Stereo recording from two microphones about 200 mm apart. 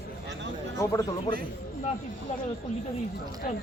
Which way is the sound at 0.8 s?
15° left (ahead or behind).